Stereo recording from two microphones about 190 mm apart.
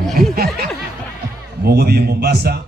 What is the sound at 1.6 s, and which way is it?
Speech, 55° right (ahead or behind).